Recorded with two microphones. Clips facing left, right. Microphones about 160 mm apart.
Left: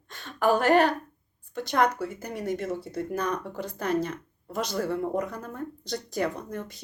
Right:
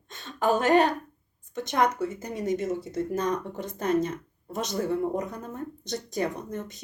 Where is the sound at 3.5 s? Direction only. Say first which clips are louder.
Right 2 dB; 20° right (ahead or behind).